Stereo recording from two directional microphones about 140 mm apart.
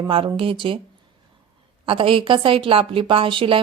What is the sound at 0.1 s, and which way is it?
Speech, 40° right (ahead or behind).